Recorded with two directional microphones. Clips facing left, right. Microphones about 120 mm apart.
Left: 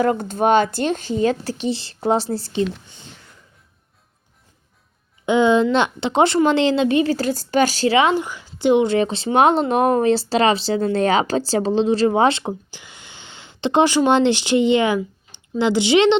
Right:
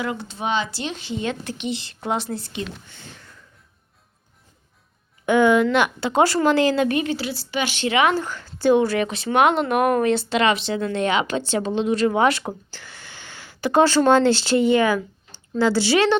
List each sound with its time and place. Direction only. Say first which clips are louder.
0.0 s speech: left 9 dB; 45° left (ahead or behind)
5.2 s a woman's voice: left 1 dB; 20° left (ahead or behind)
8.1 s a woman's voice: left 3 dB; 15° left (ahead or behind)